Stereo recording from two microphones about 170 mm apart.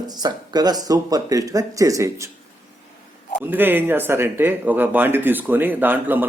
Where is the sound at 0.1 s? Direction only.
25° right (ahead or behind).